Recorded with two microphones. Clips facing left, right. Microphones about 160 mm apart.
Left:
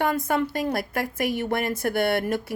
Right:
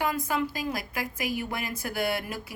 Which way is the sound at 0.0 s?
65° left (ahead or behind).